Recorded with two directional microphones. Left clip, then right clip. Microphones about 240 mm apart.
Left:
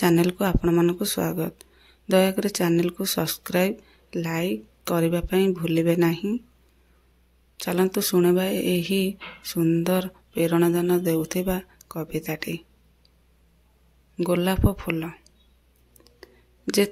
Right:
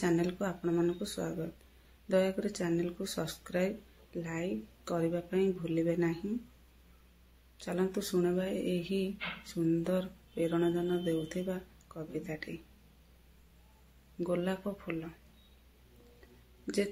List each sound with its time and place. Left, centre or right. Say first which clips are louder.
0.0 s speech: left 11 dB; left
7.5 s speech: left 11 dB; left
14.2 s speech: left 11 dB; left
16.6 s speech: left 11 dB; left